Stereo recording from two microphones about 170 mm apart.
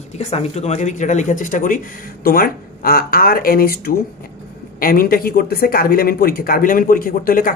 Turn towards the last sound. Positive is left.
turn(degrees=55)  # may be behind; listen again after turning